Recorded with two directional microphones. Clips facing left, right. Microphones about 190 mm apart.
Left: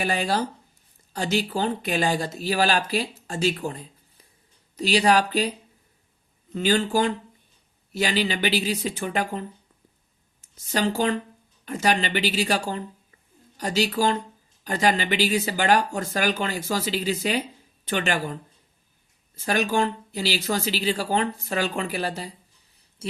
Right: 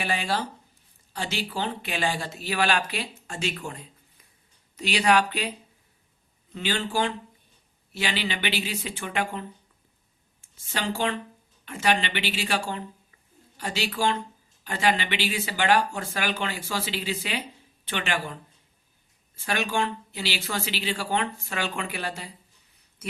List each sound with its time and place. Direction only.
0.0 s speech: 40° left (ahead or behind)
10.6 s speech: 40° left (ahead or behind)
19.4 s speech: 40° left (ahead or behind)